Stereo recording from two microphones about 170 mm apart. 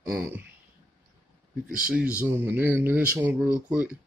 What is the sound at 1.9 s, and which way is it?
Speech, 5° right (ahead or behind).